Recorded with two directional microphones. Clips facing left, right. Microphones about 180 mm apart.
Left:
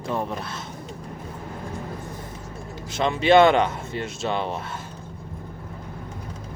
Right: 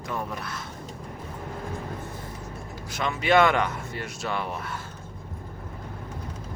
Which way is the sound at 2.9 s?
25° left (ahead or behind).